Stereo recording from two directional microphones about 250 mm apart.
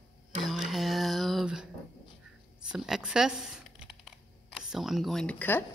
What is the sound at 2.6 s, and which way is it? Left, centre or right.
Computer keyboard, centre.